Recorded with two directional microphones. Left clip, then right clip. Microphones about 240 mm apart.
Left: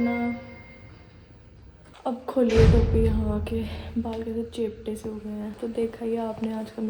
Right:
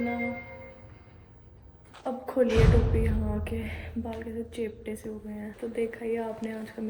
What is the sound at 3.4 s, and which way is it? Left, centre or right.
A woman's voice, centre.